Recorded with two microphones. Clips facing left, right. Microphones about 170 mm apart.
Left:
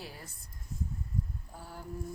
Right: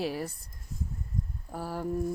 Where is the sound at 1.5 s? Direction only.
75° right (ahead or behind).